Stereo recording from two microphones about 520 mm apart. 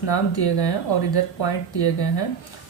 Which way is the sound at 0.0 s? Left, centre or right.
Left.